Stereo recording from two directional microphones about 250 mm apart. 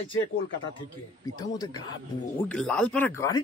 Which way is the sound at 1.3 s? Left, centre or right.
Centre.